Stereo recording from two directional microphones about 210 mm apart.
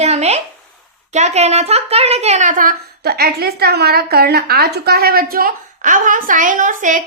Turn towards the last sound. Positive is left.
turn(degrees=-35)  # may be behind; listen again after turning